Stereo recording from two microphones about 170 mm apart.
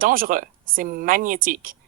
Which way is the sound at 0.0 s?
55° right (ahead or behind).